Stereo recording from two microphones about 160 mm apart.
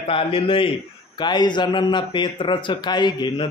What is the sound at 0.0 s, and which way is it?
A man's voice, 35° left (ahead or behind).